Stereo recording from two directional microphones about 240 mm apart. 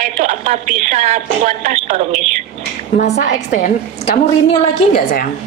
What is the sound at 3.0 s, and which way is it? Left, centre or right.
A woman's voice, left.